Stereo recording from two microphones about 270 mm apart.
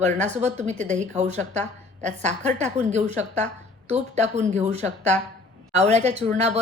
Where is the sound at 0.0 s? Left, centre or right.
Right.